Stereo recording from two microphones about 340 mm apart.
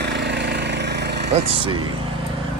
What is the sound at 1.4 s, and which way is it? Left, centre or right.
Speech, centre.